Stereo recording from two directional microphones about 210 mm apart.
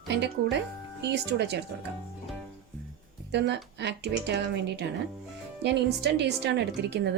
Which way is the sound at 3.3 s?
55° right (ahead or behind).